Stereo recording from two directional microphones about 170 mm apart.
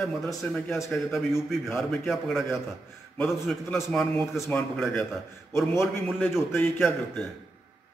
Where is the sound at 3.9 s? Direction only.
5° left (ahead or behind).